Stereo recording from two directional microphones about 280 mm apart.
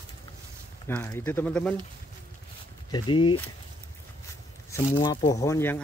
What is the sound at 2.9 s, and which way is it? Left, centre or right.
Speech, centre.